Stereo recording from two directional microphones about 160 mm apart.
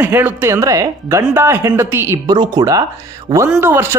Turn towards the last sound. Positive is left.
turn(degrees=-15)  # may be behind; listen again after turning